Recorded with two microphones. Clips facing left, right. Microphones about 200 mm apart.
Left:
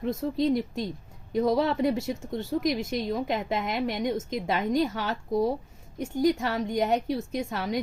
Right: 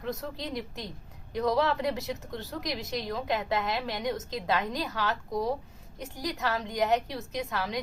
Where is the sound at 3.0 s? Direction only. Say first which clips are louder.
Left 3 dB; 20° left (ahead or behind).